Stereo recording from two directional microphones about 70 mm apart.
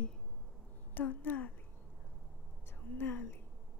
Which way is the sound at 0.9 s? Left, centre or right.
Left.